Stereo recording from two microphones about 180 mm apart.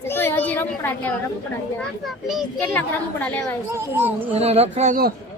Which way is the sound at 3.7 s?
10° right (ahead or behind).